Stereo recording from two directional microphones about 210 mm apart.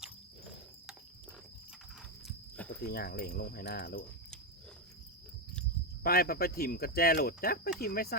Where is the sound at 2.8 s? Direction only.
45° left (ahead or behind).